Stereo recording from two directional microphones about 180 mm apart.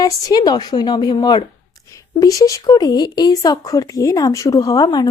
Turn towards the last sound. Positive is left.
turn(degrees=20)  # may be behind; listen again after turning